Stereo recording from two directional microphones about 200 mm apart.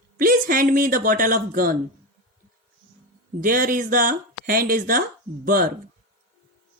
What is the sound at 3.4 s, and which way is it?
Speech, 45° right (ahead or behind).